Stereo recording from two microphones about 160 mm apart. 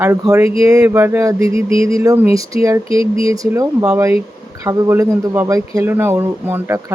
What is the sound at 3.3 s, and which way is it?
Speech, 20° right (ahead or behind).